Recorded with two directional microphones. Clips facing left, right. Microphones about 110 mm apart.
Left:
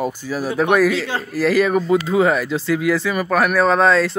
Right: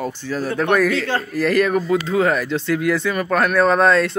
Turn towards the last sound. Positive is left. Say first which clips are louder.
# even
turn(degrees=0)  # may be behind; listen again after turning